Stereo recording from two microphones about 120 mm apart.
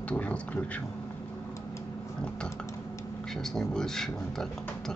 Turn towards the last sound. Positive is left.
turn(degrees=5)  # may be behind; listen again after turning